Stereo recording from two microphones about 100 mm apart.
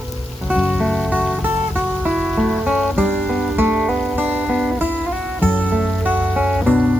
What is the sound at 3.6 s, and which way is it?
Music, 15° right (ahead or behind).